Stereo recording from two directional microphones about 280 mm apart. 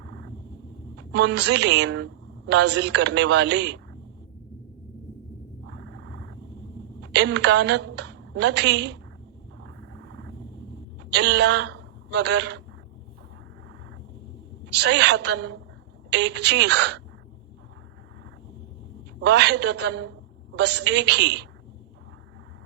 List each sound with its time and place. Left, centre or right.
0.0 s a sound: right
0.9 s a man's voice: right
5.6 s a sound: right
7.0 s a woman's voice: right
11.1 s a man's voice: right
14.7 s a man's voice: right
19.2 s a man's voice: right